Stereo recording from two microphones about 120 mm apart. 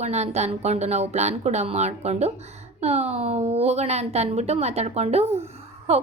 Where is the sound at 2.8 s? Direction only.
65° right (ahead or behind).